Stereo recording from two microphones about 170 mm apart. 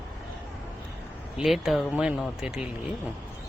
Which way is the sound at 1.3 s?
Centre (ahead or behind).